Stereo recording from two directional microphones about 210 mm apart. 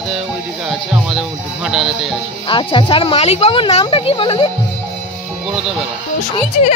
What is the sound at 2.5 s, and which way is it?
Speech, 25° left (ahead or behind).